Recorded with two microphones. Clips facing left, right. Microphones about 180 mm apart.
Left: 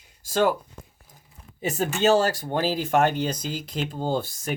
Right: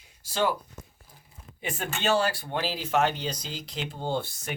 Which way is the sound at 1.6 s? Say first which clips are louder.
Left 7 dB; 40° left (ahead or behind).